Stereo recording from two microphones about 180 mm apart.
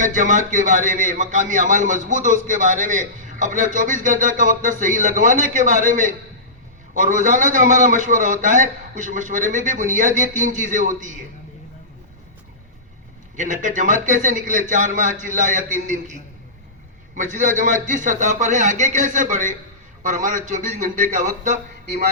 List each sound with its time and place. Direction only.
0.0 s a man's voice: 45° right (ahead or behind)
13.3 s a man's voice: 45° right (ahead or behind)
17.2 s a man's voice: 45° right (ahead or behind)